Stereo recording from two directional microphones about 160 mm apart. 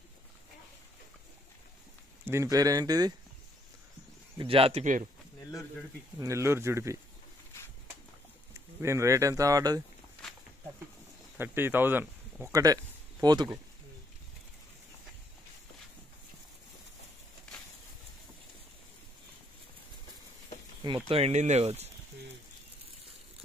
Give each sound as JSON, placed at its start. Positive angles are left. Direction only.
{"t": 2.2, "sound": "speech", "side_deg": -20}
{"t": 4.4, "sound": "speech", "side_deg": -35}
{"t": 6.1, "sound": "speech", "side_deg": -20}
{"t": 8.8, "sound": "speech", "side_deg": -20}
{"t": 11.3, "sound": "speech", "side_deg": -15}
{"t": 20.8, "sound": "speech", "side_deg": -35}